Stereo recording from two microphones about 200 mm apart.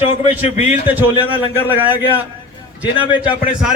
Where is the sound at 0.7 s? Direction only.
10° right (ahead or behind).